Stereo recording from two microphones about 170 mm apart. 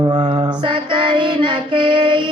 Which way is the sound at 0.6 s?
30° right (ahead or behind).